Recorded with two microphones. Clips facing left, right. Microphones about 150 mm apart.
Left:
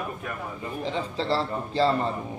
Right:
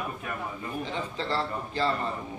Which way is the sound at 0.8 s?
30° left (ahead or behind).